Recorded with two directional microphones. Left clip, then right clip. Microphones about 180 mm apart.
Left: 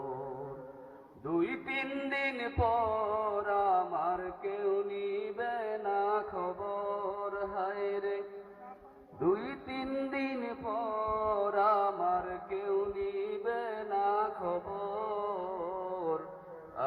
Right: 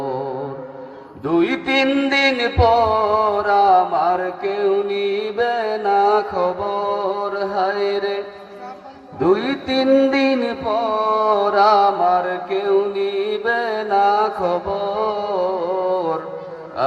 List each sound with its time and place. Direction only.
1.3 s music: 40° right (ahead or behind)
9.2 s mantra: 40° right (ahead or behind)